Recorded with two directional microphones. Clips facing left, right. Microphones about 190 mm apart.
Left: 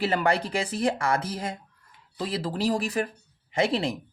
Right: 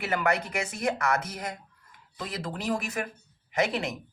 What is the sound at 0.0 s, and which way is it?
Speech, 30° left (ahead or behind).